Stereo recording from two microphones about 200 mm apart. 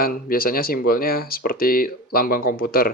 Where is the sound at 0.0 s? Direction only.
45° left (ahead or behind).